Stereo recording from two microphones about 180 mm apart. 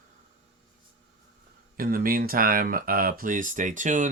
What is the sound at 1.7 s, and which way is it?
Speech, 55° right (ahead or behind).